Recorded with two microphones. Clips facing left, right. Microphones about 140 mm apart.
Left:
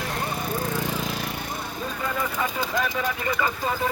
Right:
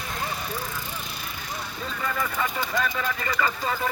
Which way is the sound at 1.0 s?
90° left.